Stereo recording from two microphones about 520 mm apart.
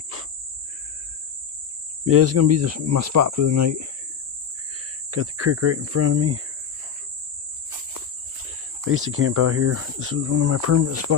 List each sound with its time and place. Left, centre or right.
2.0 s speech: right
5.1 s speech: right
8.8 s speech: right